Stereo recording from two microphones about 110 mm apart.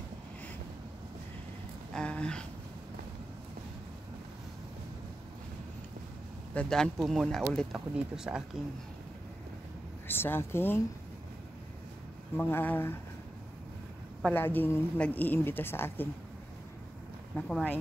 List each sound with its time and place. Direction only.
1.9 s a sound: 10° left (ahead or behind)
6.5 s speech: 10° left (ahead or behind)
7.7 s speech: 5° right (ahead or behind)
10.0 s speech: 20° left (ahead or behind)
12.4 s speech: 20° left (ahead or behind)
14.3 s a woman's voice: 20° left (ahead or behind)
17.4 s speech: 5° left (ahead or behind)